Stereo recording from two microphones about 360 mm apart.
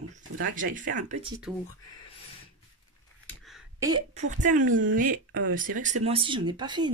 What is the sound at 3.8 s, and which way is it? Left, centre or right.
Speech, centre.